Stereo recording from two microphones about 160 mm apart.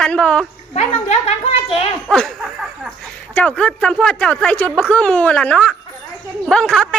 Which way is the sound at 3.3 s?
5° left (ahead or behind).